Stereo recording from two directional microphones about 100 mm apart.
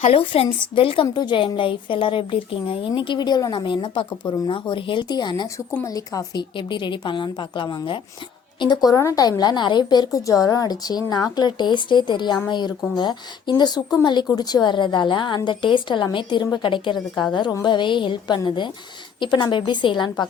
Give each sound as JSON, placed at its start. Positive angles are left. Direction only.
{"t": 0.0, "sound": "a woman's voice", "side_deg": 75}
{"t": 0.6, "sound": "speech", "side_deg": 65}
{"t": 1.1, "sound": "a woman's voice", "side_deg": 50}
{"t": 5.8, "sound": "speech", "side_deg": 35}
{"t": 6.6, "sound": "a woman's voice", "side_deg": 50}